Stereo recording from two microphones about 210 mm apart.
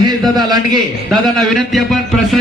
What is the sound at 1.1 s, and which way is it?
A man's voice, centre (ahead or behind).